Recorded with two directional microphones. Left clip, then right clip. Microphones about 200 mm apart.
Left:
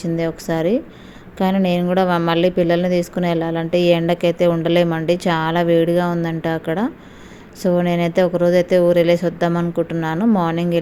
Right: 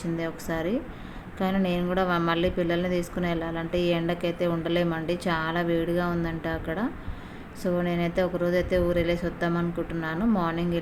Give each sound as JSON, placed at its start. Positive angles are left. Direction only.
{"t": 0.0, "sound": "a woman's voice", "side_deg": 30}